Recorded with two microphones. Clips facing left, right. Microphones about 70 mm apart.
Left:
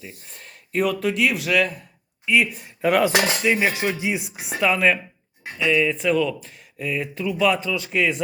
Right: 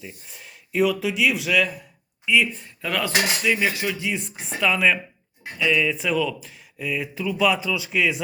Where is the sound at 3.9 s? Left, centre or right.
Centre.